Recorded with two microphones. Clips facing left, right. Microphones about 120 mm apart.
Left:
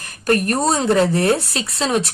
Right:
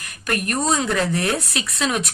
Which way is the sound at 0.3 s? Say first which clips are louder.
Left 5 dB; 35° left (ahead or behind).